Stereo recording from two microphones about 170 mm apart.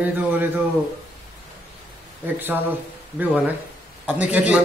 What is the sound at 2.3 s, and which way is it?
Speech, 10° right (ahead or behind).